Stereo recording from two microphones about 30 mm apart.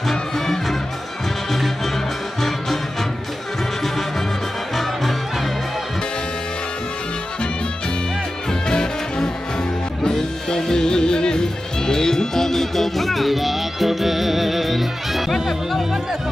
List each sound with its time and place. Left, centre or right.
0.1 s music: centre
8.6 s music: left; by 16.0 s centre